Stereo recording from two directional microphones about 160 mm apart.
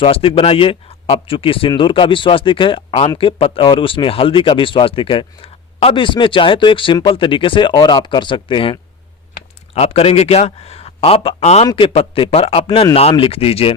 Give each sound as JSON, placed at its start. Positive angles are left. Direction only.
{"t": 0.0, "sound": "speech", "side_deg": 35}
{"t": 11.6, "sound": "speech", "side_deg": 30}